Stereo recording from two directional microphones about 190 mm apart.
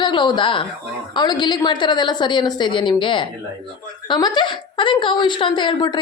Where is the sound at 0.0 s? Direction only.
25° left (ahead or behind).